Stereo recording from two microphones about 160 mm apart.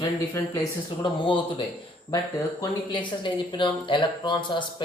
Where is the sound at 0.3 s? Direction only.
25° left (ahead or behind).